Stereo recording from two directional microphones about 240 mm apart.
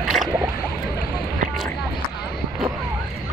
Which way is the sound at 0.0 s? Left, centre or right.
Centre.